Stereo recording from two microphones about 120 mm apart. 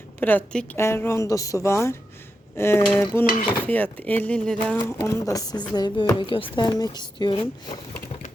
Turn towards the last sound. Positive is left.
turn(degrees=40)  # may be behind; listen again after turning